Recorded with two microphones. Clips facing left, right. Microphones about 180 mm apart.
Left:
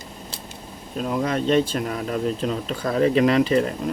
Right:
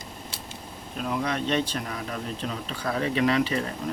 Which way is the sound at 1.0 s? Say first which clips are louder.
Left 5 dB; 40° left (ahead or behind).